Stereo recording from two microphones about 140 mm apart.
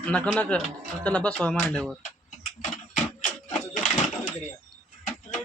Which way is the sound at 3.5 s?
65° left (ahead or behind).